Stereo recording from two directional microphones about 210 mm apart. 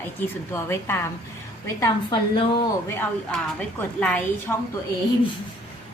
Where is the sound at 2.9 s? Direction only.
10° left (ahead or behind).